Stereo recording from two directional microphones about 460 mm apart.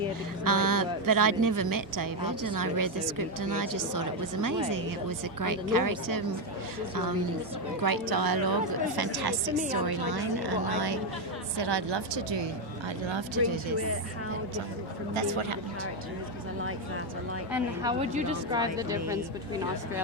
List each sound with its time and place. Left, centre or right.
0.4 s a woman's voice: right
7.8 s a woman's voice: right
15.1 s speech: right
17.5 s a woman's voice: centre